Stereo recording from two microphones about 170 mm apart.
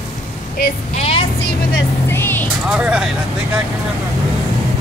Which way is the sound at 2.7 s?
5° right (ahead or behind).